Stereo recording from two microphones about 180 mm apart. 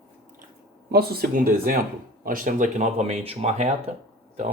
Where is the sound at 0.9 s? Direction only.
60° right (ahead or behind); by 3.7 s 35° right (ahead or behind).